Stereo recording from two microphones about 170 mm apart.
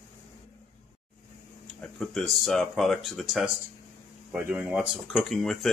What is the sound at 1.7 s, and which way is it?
Speech, centre (ahead or behind).